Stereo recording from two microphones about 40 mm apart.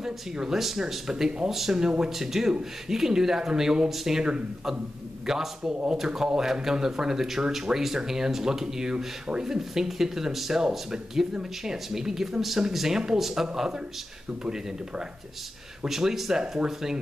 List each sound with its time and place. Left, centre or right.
0.0 s speech: centre
1.8 s speech: centre